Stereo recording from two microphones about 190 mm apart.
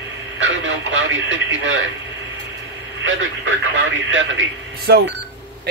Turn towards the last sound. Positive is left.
turn(degrees=-55)  # may be behind; listen again after turning